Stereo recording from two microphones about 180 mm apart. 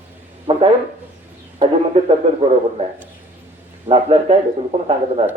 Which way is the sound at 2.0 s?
35° right (ahead or behind).